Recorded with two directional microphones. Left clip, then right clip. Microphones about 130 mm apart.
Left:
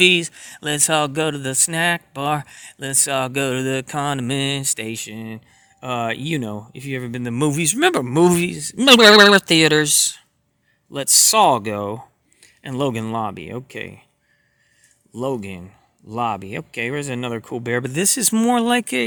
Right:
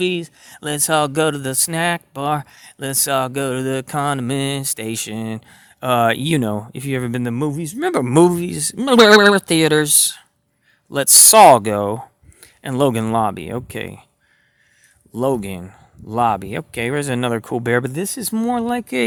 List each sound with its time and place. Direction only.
0.0 s speech: 5° left (ahead or behind)
0.4 s speech: 10° right (ahead or behind)
4.9 s speech: 40° right (ahead or behind)
7.5 s speech: 25° left (ahead or behind)
8.0 s speech: 30° right (ahead or behind)
8.8 s speech: 5° left (ahead or behind)
9.4 s speech: 10° right (ahead or behind)
10.9 s speech: 35° right (ahead or behind)
15.1 s speech: 35° right (ahead or behind)
17.9 s speech: 10° left (ahead or behind)